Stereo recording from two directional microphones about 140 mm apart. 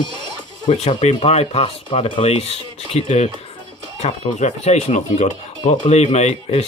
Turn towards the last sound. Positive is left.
turn(degrees=50)  # may be behind; listen again after turning